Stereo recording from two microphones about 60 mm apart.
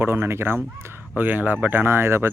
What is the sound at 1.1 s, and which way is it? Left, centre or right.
Speech, right.